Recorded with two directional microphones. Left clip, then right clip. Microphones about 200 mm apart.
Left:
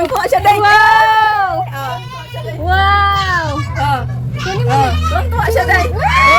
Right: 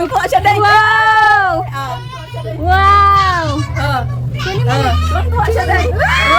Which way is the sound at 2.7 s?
20° right (ahead or behind).